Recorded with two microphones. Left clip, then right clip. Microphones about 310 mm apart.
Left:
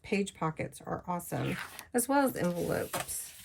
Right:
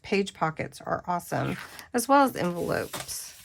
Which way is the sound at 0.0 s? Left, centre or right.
Right.